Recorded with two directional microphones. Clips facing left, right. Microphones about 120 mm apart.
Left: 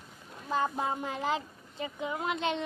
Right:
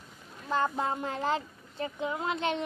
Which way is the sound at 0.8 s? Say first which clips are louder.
Right 1 dB; 15° left (ahead or behind).